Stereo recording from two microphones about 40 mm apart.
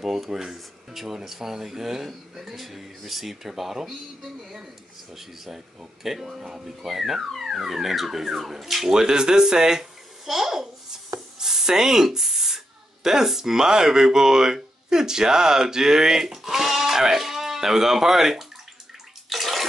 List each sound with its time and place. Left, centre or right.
0.0 s speech: centre
5.1 s speech: centre
8.9 s a child's voice: centre
19.2 s bathtub: centre